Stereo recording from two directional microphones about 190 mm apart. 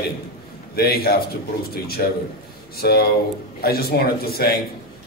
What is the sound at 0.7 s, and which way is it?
Speech, 55° left (ahead or behind).